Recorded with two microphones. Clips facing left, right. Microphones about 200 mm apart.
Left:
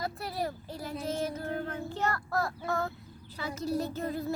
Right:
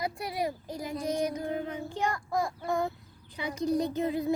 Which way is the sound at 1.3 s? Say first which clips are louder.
Right 2 dB; 15° right (ahead or behind).